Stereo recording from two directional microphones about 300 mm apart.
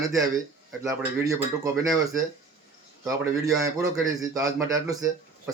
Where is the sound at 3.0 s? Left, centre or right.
Centre.